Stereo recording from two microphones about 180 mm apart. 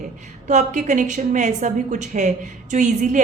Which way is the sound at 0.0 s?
45° right (ahead or behind).